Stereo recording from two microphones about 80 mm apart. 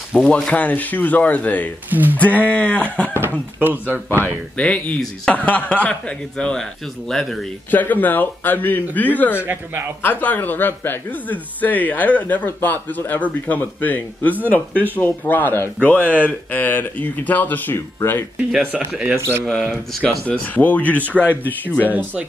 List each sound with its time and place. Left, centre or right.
0.1 s speech: centre
1.9 s speech: right
2.1 s a man's voice: centre
3.5 s speech: right
4.2 s a man's voice: centre
7.7 s speech: left
19.1 s speech: right
19.4 s speech: centre
20.0 s speech: centre